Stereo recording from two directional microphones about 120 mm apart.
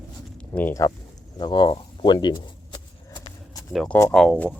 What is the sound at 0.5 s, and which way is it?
Speech, 15° left (ahead or behind).